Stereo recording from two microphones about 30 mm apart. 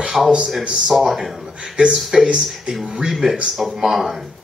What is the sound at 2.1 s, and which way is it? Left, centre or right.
Speech, right.